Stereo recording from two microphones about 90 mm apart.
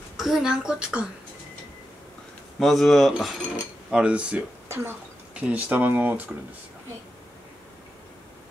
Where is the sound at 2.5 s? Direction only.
Centre (ahead or behind); by 6.3 s 20° right (ahead or behind).